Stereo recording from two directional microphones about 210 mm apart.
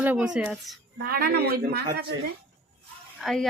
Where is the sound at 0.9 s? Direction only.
45° right (ahead or behind).